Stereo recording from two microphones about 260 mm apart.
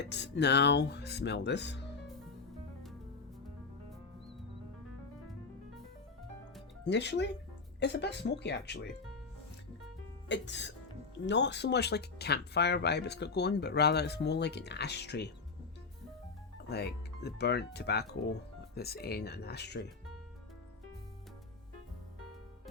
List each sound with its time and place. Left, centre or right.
0.0 s speech: left
6.8 s speech: left
10.2 s speech: left
16.6 s speech: left